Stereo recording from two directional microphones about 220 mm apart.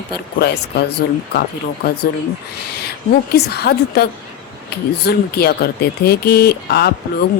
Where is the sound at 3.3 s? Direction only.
45° left (ahead or behind).